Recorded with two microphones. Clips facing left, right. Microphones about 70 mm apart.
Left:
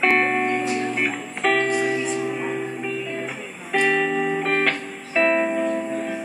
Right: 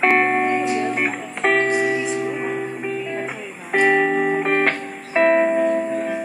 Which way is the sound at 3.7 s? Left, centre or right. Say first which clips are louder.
Right 4 dB; right.